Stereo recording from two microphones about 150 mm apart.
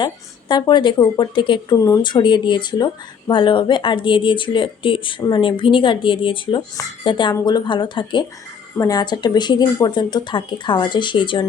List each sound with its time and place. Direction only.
0.0 s a woman's voice: 30° left (ahead or behind)